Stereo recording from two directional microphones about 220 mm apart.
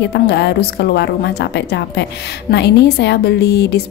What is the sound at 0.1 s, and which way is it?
A woman's voice, 50° left (ahead or behind).